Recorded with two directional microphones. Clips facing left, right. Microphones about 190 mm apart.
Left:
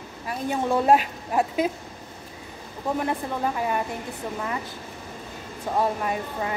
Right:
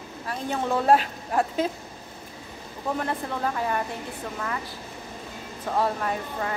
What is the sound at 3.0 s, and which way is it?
Speech, 15° left (ahead or behind).